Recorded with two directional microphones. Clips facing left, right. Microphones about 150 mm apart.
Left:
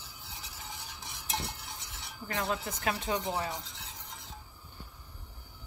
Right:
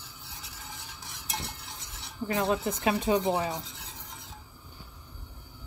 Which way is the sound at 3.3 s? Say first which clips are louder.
Right 5 dB; 15° right (ahead or behind).